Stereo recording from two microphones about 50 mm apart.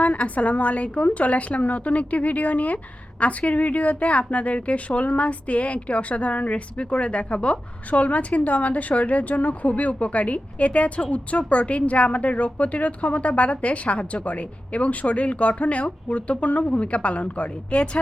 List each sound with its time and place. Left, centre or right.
0.0 s a woman's voice: left